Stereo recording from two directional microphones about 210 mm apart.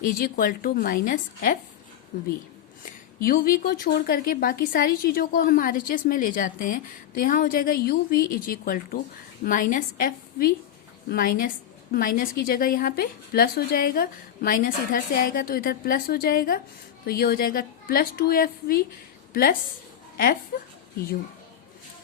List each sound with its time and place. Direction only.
0.2 s a woman's voice: 45° left (ahead or behind)
3.2 s a woman's voice: 45° left (ahead or behind)